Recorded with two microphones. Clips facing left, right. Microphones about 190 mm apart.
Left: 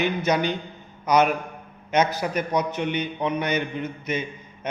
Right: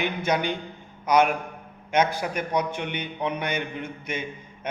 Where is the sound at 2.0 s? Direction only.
50° right (ahead or behind).